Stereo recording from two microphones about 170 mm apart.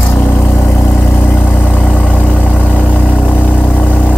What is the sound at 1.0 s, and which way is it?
Vehicle, 10° left (ahead or behind).